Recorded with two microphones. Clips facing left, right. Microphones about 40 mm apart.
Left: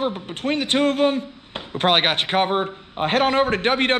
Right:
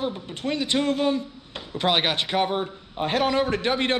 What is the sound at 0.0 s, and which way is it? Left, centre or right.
A man's voice, left.